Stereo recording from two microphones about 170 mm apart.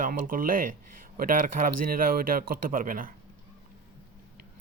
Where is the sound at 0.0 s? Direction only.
55° right (ahead or behind).